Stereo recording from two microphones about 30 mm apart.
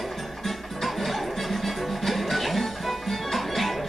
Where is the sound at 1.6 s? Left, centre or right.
Centre.